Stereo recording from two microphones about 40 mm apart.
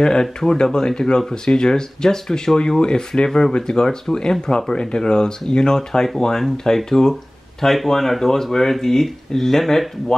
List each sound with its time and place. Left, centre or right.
0.0 s speech: centre
3.3 s speech: centre
3.5 s speech: centre